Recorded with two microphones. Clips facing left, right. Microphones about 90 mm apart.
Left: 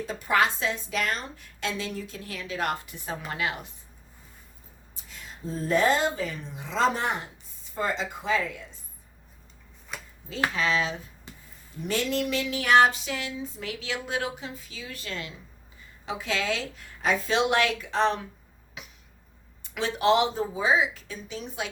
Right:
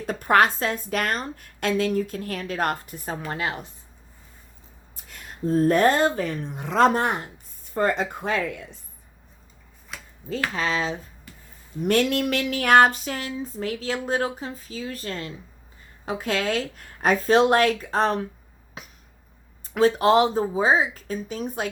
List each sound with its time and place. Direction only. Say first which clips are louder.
0.0 s a woman's voice: right 5 dB; 55° right (ahead or behind); by 3.7 s 35° right (ahead or behind)
4.9 s a woman's voice: right 8 dB; 60° right (ahead or behind)
10.5 s speech: right 1 dB; 40° right (ahead or behind)
11.8 s a woman's voice: right 6 dB; 60° right (ahead or behind); by 18.3 s 40° right (ahead or behind)
18.8 s a sound: right 3 dB; 40° right (ahead or behind)
19.6 s speech: right 5 dB; 40° right (ahead or behind)